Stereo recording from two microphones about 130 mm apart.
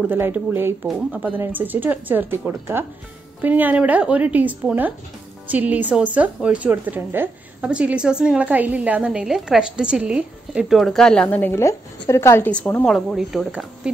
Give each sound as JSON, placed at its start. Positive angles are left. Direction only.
{"t": 0.1, "sound": "a woman's voice", "side_deg": -15}
{"t": 12.9, "sound": "speech", "side_deg": 0}